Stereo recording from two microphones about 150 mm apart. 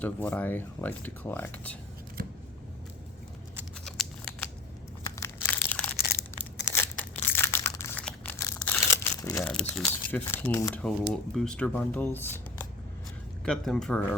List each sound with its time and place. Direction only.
0.0 s speech: 10° left (ahead or behind)
3.8 s scissors: 5° left (ahead or behind)
5.1 s crushing: 20° left (ahead or behind)
8.0 s crumpling: 10° left (ahead or behind)
9.5 s speech: 5° left (ahead or behind)
10.8 s speech: 5° left (ahead or behind)